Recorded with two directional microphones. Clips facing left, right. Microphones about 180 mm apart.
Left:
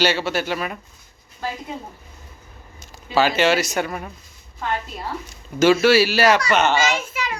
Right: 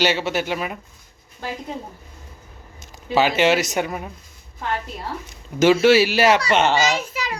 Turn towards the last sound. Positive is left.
turn(degrees=-35)  # may be behind; listen again after turning